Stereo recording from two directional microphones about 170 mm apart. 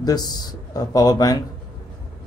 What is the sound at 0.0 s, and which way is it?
Speech, 20° left (ahead or behind).